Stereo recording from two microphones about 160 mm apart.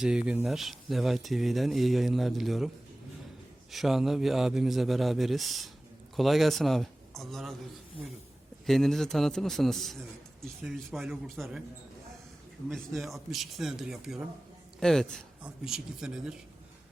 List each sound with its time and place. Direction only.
0.0 s a man's voice: 5° right (ahead or behind)
3.7 s a man's voice: centre (ahead or behind)
8.6 s a man's voice: centre (ahead or behind)
12.6 s a man's voice: centre (ahead or behind)